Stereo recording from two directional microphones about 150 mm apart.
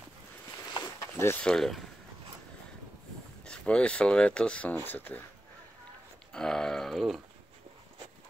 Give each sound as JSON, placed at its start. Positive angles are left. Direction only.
{"t": 1.2, "sound": "speech", "side_deg": 10}
{"t": 3.4, "sound": "speech", "side_deg": 5}
{"t": 6.3, "sound": "speech", "side_deg": 5}